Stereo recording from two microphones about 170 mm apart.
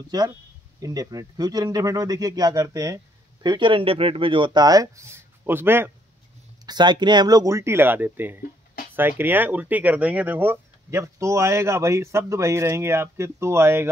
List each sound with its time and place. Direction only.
0.1 s speech: 25° right (ahead or behind)
6.6 s speech: 25° right (ahead or behind)